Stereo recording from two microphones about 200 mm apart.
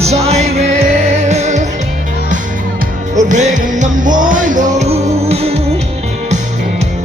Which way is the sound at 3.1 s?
35° right (ahead or behind).